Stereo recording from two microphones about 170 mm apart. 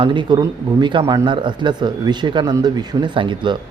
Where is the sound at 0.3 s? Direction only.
25° right (ahead or behind).